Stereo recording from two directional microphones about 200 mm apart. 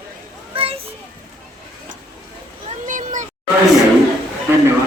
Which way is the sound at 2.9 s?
40° right (ahead or behind).